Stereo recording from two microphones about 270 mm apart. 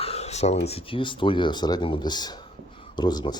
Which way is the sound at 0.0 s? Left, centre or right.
Left.